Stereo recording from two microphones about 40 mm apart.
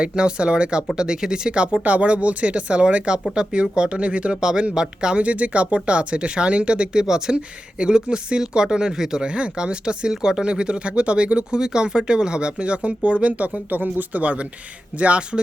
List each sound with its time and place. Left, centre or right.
0.0 s speech: right
1.8 s speech: right
7.0 s speech: centre
7.3 s speech: right
13.7 s speech: right